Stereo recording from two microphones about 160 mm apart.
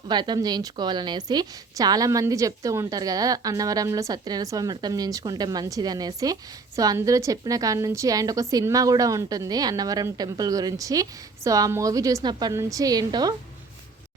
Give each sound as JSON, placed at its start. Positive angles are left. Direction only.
{"t": 0.1, "sound": "a woman's voice", "side_deg": -25}